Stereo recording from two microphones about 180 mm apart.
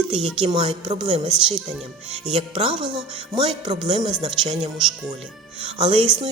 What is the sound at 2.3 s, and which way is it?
Speech, 30° right (ahead or behind).